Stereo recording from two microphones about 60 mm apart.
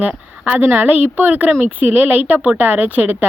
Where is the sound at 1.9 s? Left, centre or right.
Right.